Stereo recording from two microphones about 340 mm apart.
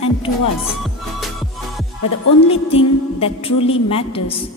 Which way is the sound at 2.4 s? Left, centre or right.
Centre.